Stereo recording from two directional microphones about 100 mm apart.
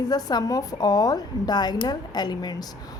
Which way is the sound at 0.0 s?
40° left (ahead or behind).